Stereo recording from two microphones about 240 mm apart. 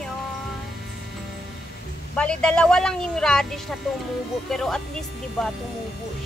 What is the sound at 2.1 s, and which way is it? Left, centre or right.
Speech, centre.